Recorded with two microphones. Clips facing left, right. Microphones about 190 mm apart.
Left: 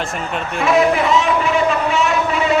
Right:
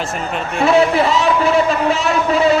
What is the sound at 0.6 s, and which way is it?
A man's voice, 30° right (ahead or behind).